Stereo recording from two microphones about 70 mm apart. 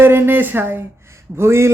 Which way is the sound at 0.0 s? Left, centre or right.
Right.